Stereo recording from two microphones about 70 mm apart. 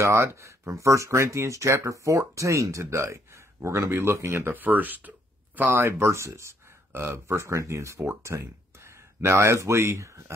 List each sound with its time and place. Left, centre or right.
0.0 s speech: right